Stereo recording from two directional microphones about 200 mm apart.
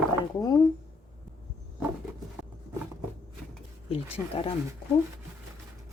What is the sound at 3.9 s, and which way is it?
Speech, 30° left (ahead or behind).